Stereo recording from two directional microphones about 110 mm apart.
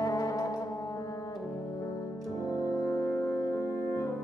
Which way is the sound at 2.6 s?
30° left (ahead or behind).